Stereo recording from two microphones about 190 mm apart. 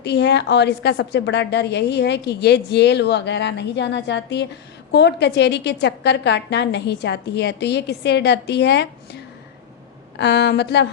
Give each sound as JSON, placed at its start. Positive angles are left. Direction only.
{"t": 0.0, "sound": "a woman's voice", "side_deg": 60}
{"t": 10.2, "sound": "a woman's voice", "side_deg": 65}